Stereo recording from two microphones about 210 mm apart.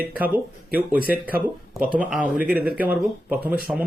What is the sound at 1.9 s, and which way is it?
Speech, 5° right (ahead or behind).